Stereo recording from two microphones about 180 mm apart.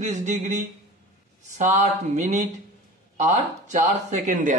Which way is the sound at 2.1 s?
40° right (ahead or behind).